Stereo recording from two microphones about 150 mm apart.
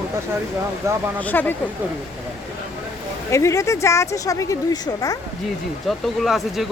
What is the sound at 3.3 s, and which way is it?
Speech, 20° left (ahead or behind).